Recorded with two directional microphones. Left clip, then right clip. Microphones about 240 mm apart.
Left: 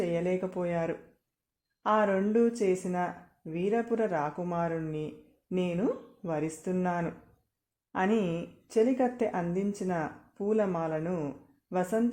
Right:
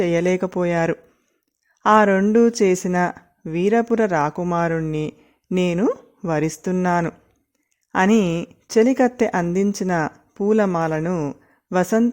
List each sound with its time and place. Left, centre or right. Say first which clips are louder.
0.0 s speech: right 11 dB; right